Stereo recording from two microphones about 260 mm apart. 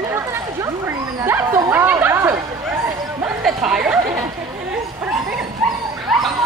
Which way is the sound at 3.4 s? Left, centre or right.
Centre.